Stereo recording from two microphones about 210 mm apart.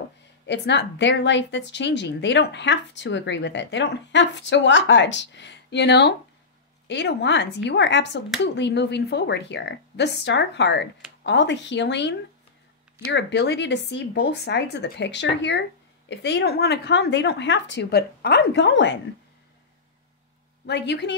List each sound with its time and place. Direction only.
0.5 s a woman's voice: 55° left (ahead or behind)
20.6 s a woman's voice: 55° left (ahead or behind)